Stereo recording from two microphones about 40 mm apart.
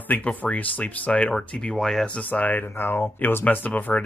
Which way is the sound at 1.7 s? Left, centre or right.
Centre.